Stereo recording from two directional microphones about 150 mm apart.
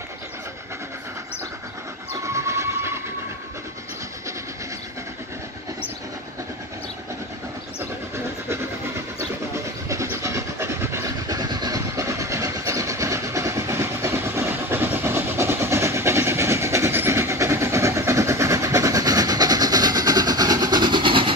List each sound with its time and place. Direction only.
2.2 s train: 20° right (ahead or behind)
9.8 s vehicle: 20° right (ahead or behind)